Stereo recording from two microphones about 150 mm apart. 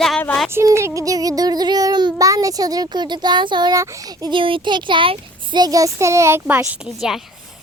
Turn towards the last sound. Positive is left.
turn(degrees=0)  # may be behind; listen again after turning